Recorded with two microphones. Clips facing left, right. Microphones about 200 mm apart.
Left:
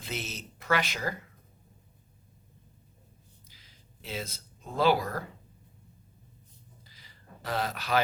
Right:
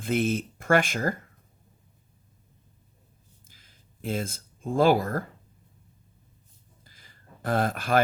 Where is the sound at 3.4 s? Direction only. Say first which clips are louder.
Left 1 dB; 50° right (ahead or behind).